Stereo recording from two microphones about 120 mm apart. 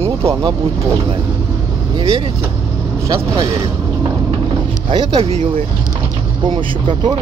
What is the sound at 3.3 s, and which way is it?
Mechanisms, 40° right (ahead or behind).